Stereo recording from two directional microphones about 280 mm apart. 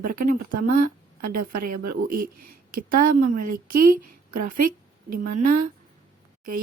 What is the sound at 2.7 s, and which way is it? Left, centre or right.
Speech, right.